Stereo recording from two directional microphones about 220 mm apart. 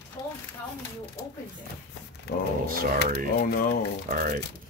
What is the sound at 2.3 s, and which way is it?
Speech, 50° left (ahead or behind).